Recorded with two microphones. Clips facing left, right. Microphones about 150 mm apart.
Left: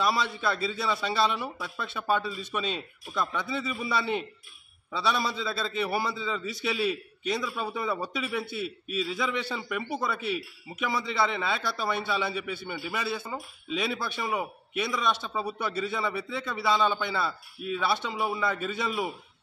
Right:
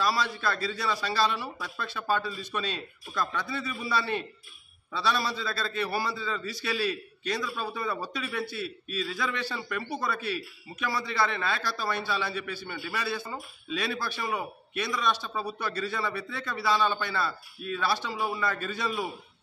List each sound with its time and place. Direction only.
0.0 s a man's voice: 20° left (ahead or behind)